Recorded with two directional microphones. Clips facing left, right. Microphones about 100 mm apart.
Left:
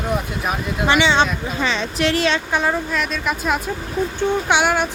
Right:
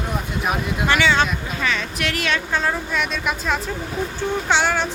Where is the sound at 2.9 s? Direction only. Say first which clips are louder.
Left 1 dB; centre (ahead or behind).